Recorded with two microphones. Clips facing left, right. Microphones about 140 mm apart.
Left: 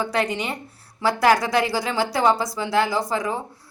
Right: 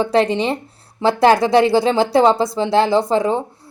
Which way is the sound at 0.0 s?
30° right (ahead or behind).